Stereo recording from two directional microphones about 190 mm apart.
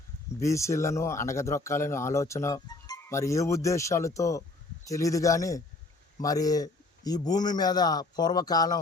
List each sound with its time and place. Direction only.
0.3 s a man's voice: 15° left (ahead or behind)